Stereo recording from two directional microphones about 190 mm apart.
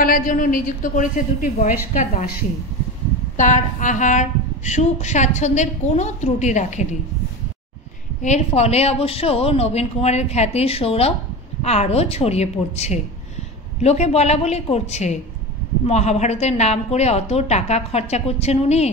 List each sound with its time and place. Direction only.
0.0 s a woman's voice: 45° left (ahead or behind)
3.3 s a woman's voice: 40° left (ahead or behind)
8.2 s a woman's voice: 35° left (ahead or behind)